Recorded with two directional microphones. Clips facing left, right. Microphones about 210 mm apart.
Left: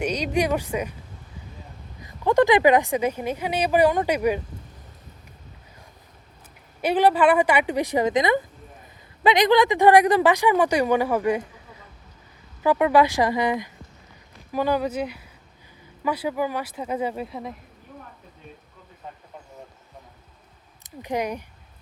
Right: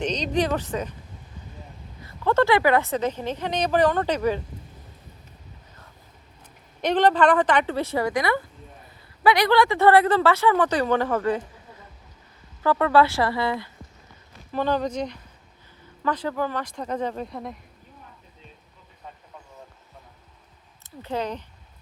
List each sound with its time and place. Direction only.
0.0 s speech: 10° left (ahead or behind)
2.0 s speech: 15° left (ahead or behind)
6.8 s speech: 10° left (ahead or behind)
12.6 s speech: 15° left (ahead or behind)
20.8 s speech: 15° left (ahead or behind)